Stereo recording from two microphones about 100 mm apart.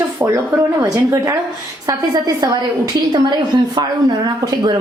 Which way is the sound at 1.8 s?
40° right (ahead or behind).